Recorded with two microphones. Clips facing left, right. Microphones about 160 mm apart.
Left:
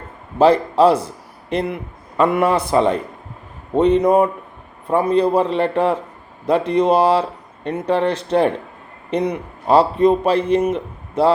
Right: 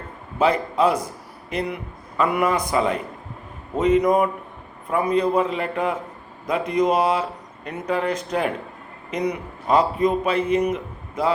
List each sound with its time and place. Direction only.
0.3 s a man's voice: 30° left (ahead or behind)